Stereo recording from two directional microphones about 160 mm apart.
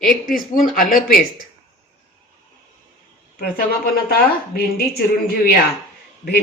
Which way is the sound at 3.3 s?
70° left (ahead or behind).